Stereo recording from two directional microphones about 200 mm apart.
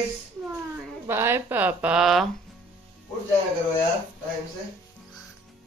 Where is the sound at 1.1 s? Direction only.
10° right (ahead or behind).